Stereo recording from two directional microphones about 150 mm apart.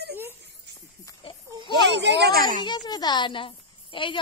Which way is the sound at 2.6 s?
30° left (ahead or behind).